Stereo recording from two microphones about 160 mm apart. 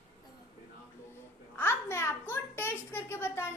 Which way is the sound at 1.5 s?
15° left (ahead or behind).